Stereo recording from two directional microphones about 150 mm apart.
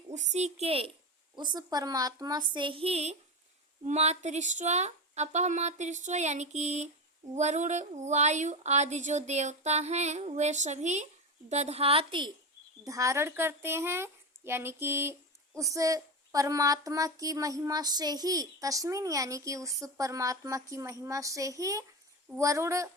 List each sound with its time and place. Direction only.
0.1 s a woman's voice: 50° right (ahead or behind)
1.4 s a woman's voice: 30° right (ahead or behind)
12.8 s a woman's voice: 20° right (ahead or behind)